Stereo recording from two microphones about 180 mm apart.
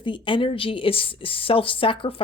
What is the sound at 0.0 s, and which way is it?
Speech, 25° left (ahead or behind).